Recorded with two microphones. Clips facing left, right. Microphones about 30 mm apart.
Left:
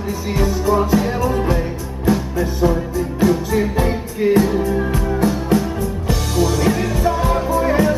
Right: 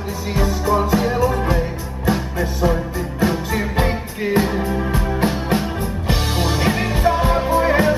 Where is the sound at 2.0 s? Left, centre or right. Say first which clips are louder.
Left 2 dB; right.